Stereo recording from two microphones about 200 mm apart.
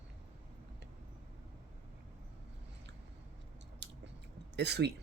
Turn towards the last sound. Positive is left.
turn(degrees=-55)  # may be behind; listen again after turning